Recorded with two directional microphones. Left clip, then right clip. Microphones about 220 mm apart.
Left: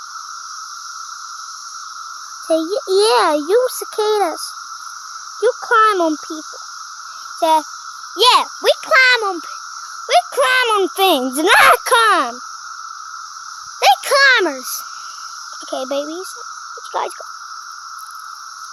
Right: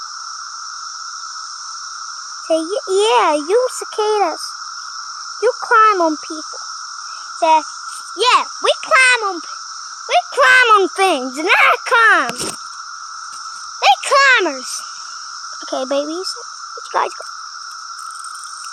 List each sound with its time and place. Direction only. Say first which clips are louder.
2.5 s a child's voice: left 1 dB; 10° left (ahead or behind)
5.4 s speech: right 1 dB; 5° left (ahead or behind)
7.3 s cricket: right 2 dB; 15° left (ahead or behind)
8.2 s a child's voice: left 1 dB; 15° left (ahead or behind)
10.3 s speech: right 5 dB; 5° right (ahead or behind)
11.0 s a child's voice: left 2 dB; 20° left (ahead or behind)
13.8 s insect: even; 10° left (ahead or behind)
15.7 s speech: right 3 dB; 5° right (ahead or behind)